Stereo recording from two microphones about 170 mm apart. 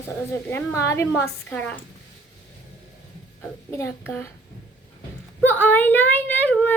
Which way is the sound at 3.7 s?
15° left (ahead or behind).